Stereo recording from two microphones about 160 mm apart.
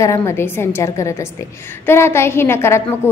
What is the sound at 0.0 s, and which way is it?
A woman's voice, 15° left (ahead or behind).